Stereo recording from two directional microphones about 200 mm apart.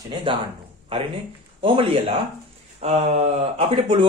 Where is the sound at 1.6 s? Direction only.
25° right (ahead or behind).